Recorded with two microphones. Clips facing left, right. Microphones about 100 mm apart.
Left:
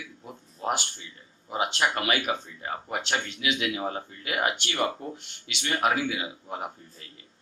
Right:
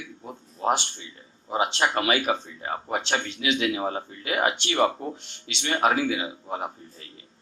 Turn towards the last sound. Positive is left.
turn(degrees=-30)  # may be behind; listen again after turning